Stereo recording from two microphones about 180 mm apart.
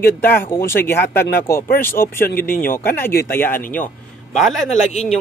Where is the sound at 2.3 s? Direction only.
55° left (ahead or behind).